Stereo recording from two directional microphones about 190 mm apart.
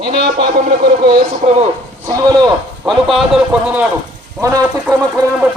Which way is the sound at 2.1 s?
20° right (ahead or behind).